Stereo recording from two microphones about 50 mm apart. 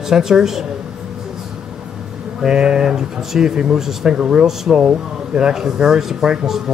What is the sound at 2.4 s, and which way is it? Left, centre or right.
A man's voice, centre.